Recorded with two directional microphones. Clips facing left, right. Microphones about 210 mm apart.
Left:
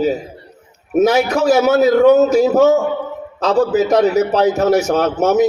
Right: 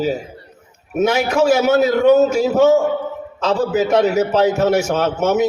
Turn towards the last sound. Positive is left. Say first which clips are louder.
# left 3 dB
turn(degrees=35)  # may be behind; listen again after turning